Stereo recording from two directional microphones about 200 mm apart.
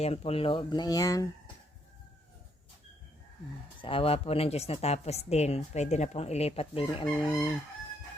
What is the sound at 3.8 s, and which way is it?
A woman's voice, 30° left (ahead or behind).